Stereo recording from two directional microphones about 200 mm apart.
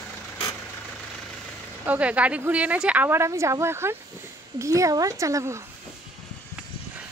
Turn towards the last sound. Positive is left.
turn(degrees=-15)  # may be behind; listen again after turning